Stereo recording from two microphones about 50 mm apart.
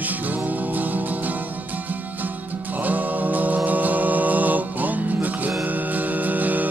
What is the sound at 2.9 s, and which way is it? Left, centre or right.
Music, right.